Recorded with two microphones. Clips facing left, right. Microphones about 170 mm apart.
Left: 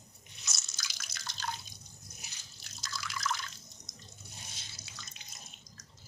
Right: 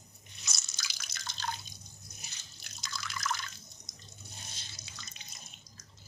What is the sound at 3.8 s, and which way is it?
Water, 45° left (ahead or behind).